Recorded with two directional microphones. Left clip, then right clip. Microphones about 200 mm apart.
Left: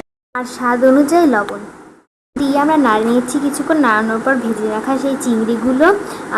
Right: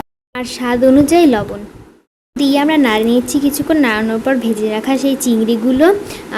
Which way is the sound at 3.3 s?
5° right (ahead or behind).